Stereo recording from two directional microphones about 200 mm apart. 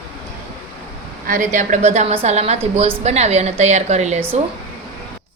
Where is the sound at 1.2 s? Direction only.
40° right (ahead or behind).